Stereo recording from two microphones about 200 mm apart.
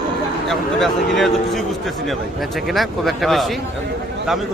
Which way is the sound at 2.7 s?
Centre (ahead or behind).